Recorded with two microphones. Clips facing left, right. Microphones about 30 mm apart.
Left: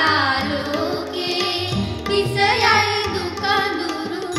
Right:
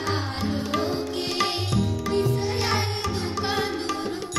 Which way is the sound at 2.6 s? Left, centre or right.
Left.